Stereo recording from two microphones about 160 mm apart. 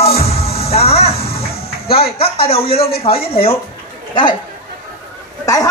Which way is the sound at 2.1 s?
35° left (ahead or behind).